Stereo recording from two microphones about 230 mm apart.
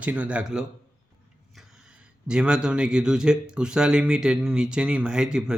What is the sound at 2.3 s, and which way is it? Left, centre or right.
Speech, centre.